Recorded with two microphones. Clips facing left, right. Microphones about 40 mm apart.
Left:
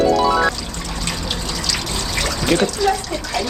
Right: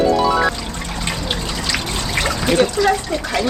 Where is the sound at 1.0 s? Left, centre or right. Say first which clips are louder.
Right 2 dB; right.